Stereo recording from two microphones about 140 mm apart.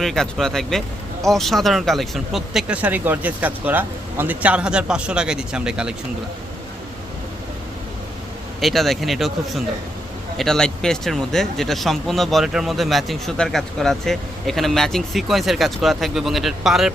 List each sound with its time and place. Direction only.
0.0 s speech: centre (ahead or behind)
8.6 s speech: centre (ahead or behind)